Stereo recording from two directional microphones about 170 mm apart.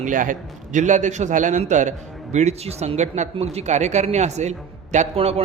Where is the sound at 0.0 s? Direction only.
50° right (ahead or behind).